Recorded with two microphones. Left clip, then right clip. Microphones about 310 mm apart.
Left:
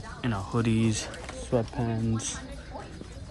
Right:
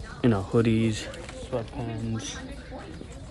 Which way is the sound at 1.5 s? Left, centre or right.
Left.